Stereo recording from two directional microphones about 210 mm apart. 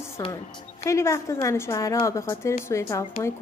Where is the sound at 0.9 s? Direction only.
15° left (ahead or behind).